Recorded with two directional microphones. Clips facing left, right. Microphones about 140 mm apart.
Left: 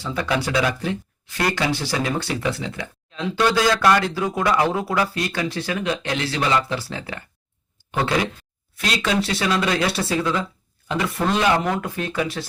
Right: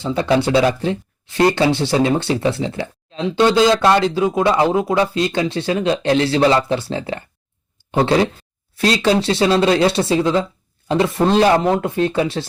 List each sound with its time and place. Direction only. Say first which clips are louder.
0.0 s speech: right 7 dB; 25° right (ahead or behind)